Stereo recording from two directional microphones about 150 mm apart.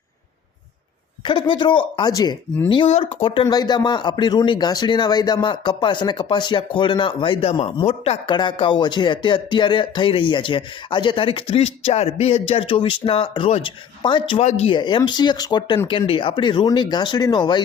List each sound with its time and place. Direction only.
1.2 s speech: 30° left (ahead or behind)
3.4 s speech: 25° left (ahead or behind)